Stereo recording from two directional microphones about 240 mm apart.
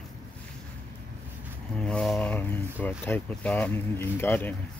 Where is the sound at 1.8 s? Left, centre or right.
Centre.